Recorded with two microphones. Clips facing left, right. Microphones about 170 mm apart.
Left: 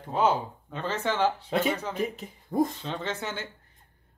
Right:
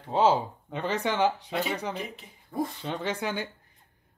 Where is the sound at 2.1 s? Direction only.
45° left (ahead or behind).